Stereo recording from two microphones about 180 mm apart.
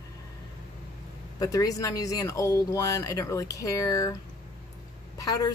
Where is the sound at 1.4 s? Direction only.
20° left (ahead or behind).